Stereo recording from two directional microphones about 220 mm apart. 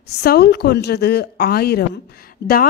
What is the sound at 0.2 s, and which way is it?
A woman's voice, 45° left (ahead or behind).